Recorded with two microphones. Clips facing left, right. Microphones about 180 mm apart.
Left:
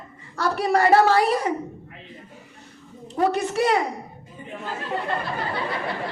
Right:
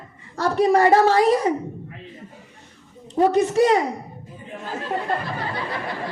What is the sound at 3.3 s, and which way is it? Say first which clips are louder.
Speech: right 5 dB; 35° right (ahead or behind).